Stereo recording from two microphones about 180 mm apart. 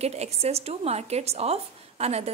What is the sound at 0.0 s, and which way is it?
A woman's voice, 35° right (ahead or behind).